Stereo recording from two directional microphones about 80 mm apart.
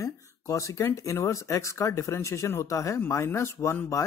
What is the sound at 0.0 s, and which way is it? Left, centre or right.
Speech, left.